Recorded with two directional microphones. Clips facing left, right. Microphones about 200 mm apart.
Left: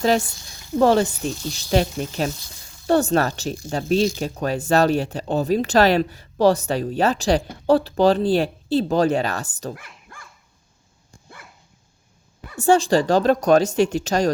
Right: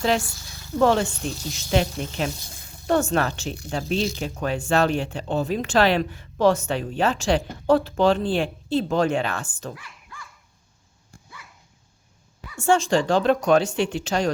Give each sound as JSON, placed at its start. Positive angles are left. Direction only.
{"t": 0.2, "sound": "a sound", "side_deg": 20}
{"t": 0.8, "sound": "speech", "side_deg": 35}
{"t": 12.5, "sound": "speech", "side_deg": 35}